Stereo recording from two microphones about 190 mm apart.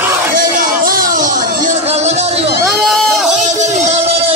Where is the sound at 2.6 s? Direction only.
Centre (ahead or behind).